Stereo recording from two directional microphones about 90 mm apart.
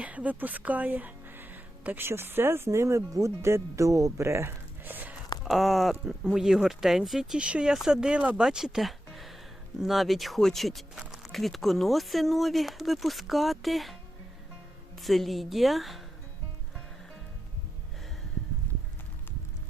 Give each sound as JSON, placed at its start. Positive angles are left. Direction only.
{"t": 0.0, "sound": "speech", "side_deg": -15}
{"t": 5.5, "sound": "speech", "side_deg": 0}
{"t": 11.0, "sound": "a sound", "side_deg": -5}
{"t": 11.3, "sound": "speech", "side_deg": 0}
{"t": 15.0, "sound": "speech", "side_deg": 0}